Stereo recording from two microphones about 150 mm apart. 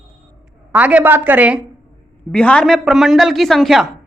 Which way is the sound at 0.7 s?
10° right (ahead or behind).